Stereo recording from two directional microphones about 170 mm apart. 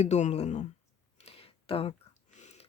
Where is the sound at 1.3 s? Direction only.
35° left (ahead or behind).